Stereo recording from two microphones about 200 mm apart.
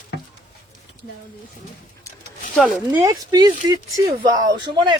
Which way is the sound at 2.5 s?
Centre (ahead or behind).